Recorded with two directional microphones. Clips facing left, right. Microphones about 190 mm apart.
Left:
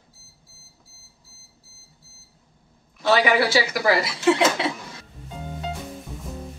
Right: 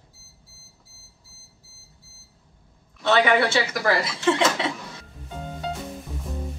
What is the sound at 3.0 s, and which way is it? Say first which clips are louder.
Speech: even; 5° left (ahead or behind).